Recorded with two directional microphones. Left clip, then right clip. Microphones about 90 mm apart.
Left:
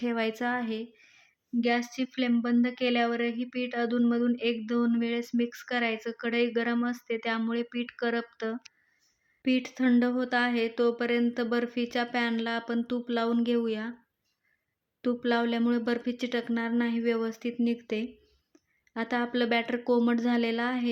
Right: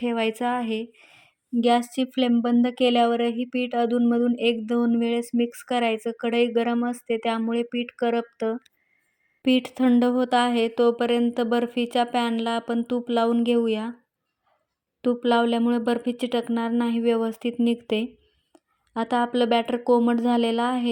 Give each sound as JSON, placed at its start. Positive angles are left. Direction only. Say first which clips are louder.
{"t": 0.0, "sound": "a woman's voice", "louder": "right 5 dB", "side_deg": -45}
{"t": 9.4, "sound": "a woman's voice", "louder": "right 6 dB", "side_deg": -70}
{"t": 15.0, "sound": "a woman's voice", "louder": "right 7 dB", "side_deg": -45}
{"t": 17.2, "sound": "speech", "louder": "right 6 dB", "side_deg": -75}
{"t": 18.9, "sound": "a woman's voice", "louder": "right 7 dB", "side_deg": -50}